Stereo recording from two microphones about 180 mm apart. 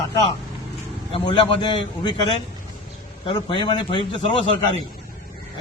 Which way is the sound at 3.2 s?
25° left (ahead or behind).